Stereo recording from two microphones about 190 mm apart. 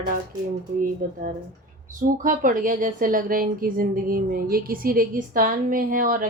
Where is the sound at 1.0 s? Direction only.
45° right (ahead or behind).